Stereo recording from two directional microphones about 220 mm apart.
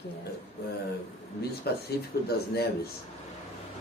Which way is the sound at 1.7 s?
45° left (ahead or behind).